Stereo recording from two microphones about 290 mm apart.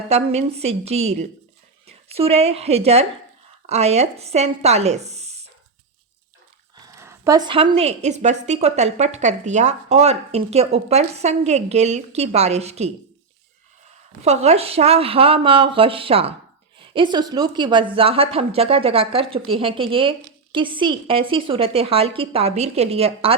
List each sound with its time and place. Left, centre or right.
0.1 s a woman's voice: right
6.7 s a sound: centre
7.7 s a woman's voice: right
14.2 s a woman's voice: right